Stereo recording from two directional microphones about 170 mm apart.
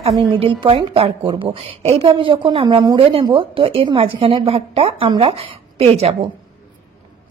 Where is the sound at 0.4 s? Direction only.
30° right (ahead or behind).